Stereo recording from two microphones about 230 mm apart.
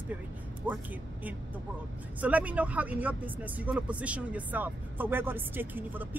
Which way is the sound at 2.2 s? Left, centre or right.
Centre.